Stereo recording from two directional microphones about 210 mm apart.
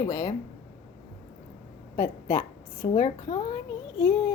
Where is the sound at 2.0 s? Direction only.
20° left (ahead or behind).